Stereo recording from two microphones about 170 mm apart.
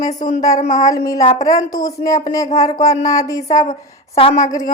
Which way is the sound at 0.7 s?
20° left (ahead or behind).